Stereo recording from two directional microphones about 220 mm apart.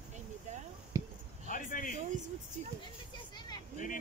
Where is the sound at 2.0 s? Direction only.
35° right (ahead or behind).